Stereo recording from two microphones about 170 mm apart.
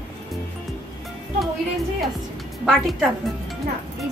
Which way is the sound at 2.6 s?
Centre (ahead or behind).